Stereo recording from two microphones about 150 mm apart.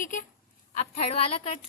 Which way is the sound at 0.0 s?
60° left (ahead or behind).